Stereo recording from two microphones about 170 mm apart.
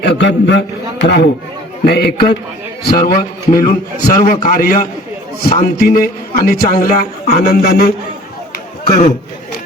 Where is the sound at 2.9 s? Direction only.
60° left (ahead or behind).